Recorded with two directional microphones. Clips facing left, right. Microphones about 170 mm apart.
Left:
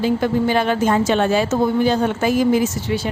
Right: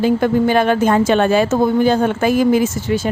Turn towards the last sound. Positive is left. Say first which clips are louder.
# right 3 dB
turn(degrees=-45)  # may be behind; listen again after turning